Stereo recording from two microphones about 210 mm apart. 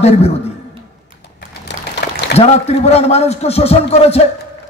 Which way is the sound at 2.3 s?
30° left (ahead or behind).